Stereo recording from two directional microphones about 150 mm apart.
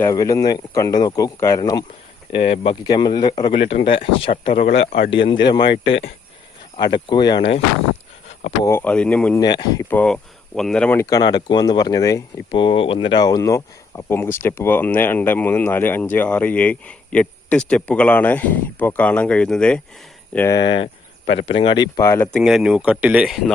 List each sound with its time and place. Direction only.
0.1 s speech: 20° left (ahead or behind)
2.3 s speech: 40° left (ahead or behind)
2.8 s speech: 30° left (ahead or behind)
3.5 s speech: 40° left (ahead or behind)
6.7 s speech: 30° left (ahead or behind)
8.6 s speech: 15° left (ahead or behind)
9.4 s speech: 25° left (ahead or behind)
9.9 s speech: 5° left (ahead or behind)
10.9 s speech: 25° left (ahead or behind)
12.5 s speech: 35° left (ahead or behind); by 20.6 s 15° left (ahead or behind)
20.6 s speech: 30° left (ahead or behind)
22.3 s speech: centre (ahead or behind)